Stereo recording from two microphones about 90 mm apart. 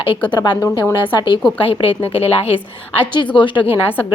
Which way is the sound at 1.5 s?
90° left.